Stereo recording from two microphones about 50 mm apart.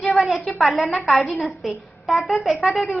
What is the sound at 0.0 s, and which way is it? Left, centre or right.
A woman's voice, centre.